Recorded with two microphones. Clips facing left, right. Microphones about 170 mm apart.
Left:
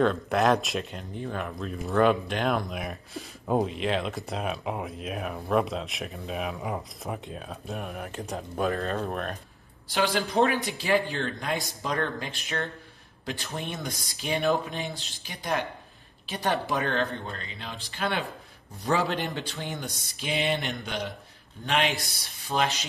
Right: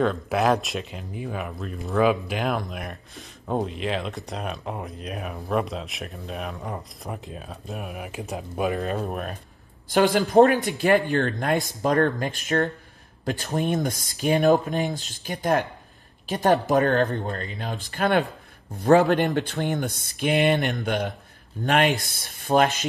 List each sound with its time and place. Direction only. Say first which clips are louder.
0.0 s speech: right 1 dB; centre (ahead or behind)
8.6 s speech: right 3 dB; 15° right (ahead or behind)
9.8 s a man's voice: right 7 dB; 50° right (ahead or behind)
10.7 s speech: right 6 dB; 60° right (ahead or behind)
19.6 s speech: right 9 dB; 60° right (ahead or behind)